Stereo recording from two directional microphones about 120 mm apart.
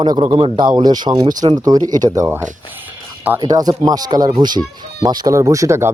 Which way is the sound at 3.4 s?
35° right (ahead or behind).